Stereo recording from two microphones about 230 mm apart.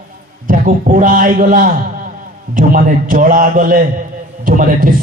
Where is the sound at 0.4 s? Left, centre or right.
Right.